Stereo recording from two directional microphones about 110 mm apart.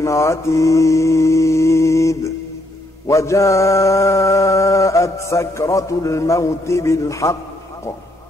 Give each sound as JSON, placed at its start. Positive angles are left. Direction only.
{"t": 0.0, "sound": "mantra", "side_deg": 25}